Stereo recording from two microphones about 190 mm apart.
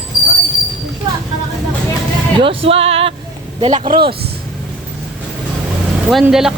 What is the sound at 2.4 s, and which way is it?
Speech, 30° right (ahead or behind).